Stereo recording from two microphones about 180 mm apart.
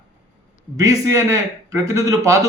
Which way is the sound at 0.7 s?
15° right (ahead or behind).